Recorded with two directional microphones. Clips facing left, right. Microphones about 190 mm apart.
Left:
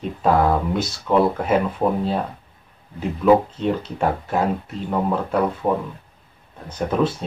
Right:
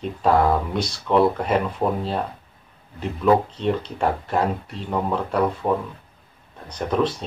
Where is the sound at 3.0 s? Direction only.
5° left (ahead or behind).